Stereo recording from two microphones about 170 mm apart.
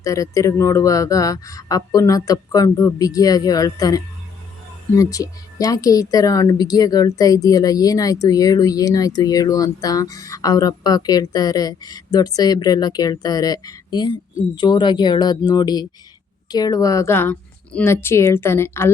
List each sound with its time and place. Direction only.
0.0 s a woman's voice: 20° left (ahead or behind)